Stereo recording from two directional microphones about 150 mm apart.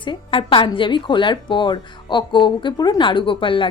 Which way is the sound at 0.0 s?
35° left (ahead or behind).